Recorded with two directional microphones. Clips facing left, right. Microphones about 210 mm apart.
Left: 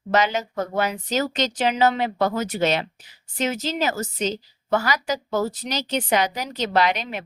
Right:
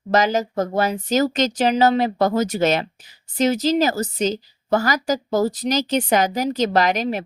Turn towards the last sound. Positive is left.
turn(degrees=-40)  # may be behind; listen again after turning